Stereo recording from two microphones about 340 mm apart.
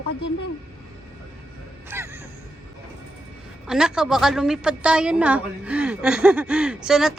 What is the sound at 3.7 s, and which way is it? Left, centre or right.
A woman's voice, centre.